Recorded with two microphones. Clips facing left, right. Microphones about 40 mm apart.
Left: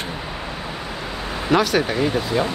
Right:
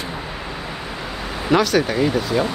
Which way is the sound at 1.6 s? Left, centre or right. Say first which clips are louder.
Right 2 dB; centre.